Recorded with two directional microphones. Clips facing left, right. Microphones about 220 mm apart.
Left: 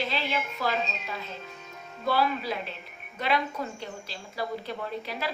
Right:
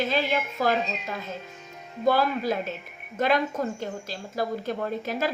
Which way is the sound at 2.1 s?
45° right (ahead or behind).